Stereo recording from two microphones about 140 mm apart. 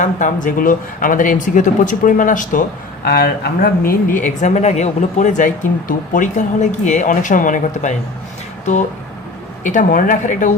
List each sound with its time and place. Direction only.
0.0 s speech: 65° left (ahead or behind)
9.6 s speech: 65° left (ahead or behind)